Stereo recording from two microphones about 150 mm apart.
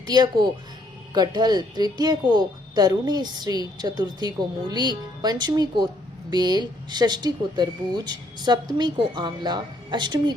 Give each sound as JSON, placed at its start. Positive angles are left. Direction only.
{"t": 0.0, "sound": "speech", "side_deg": -25}